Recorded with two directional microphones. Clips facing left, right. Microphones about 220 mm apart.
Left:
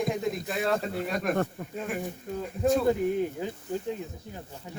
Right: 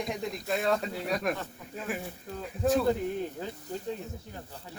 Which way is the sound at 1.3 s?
50° left (ahead or behind).